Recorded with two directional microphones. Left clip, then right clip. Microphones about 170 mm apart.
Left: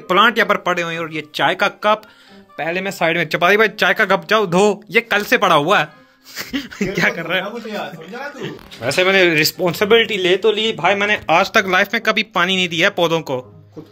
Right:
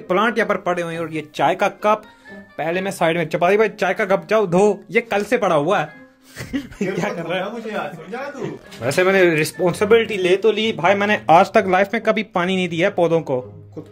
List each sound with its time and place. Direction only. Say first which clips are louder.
0.1 s speech: left 5 dB; centre (ahead or behind)
8.8 s speech: left 2 dB; 20° right (ahead or behind); by 10.5 s 5° right (ahead or behind)
10.5 s a man's voice: left 1 dB; 15° right (ahead or behind)